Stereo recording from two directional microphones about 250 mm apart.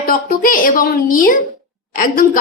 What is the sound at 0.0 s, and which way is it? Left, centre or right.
Speech, left.